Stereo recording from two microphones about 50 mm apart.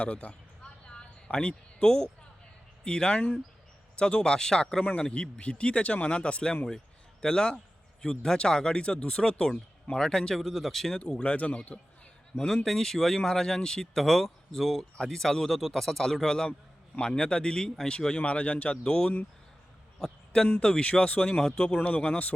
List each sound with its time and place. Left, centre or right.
0.0 s a sound: left
2.8 s speech: centre
10.4 s speech: centre
11.1 s speech: left
12.6 s speech: centre
14.9 s speech: centre
18.8 s speech: centre
20.0 s a sound: centre
20.5 s speech: centre
21.8 s speech: left